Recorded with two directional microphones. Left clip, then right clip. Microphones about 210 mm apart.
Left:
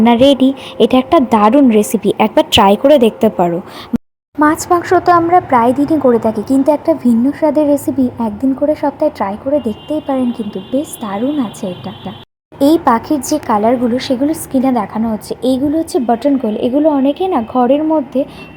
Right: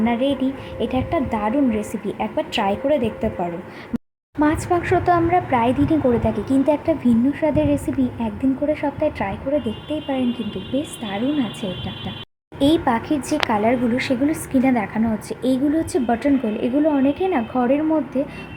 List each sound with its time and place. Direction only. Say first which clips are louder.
0.0 s a woman's voice: left 12 dB; 45° left (ahead or behind)
4.4 s speech: left 8 dB; 25° left (ahead or behind)
12.5 s a woman's voice: left 8 dB; 25° left (ahead or behind)